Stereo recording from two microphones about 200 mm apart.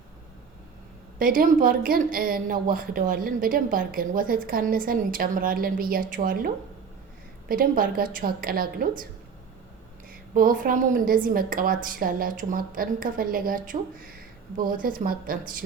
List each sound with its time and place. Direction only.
1.2 s speech: 45° right (ahead or behind)
10.1 s speech: 45° right (ahead or behind)